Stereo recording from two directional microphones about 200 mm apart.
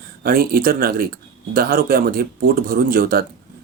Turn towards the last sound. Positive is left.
turn(degrees=-50)  # may be behind; listen again after turning